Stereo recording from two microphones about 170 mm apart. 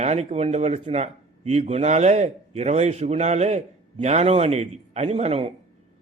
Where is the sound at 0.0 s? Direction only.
40° right (ahead or behind).